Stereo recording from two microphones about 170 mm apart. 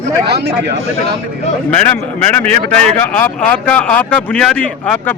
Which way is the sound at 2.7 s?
10° left (ahead or behind).